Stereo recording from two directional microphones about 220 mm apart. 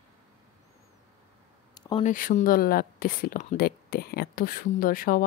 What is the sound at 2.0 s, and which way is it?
Speech, 35° left (ahead or behind).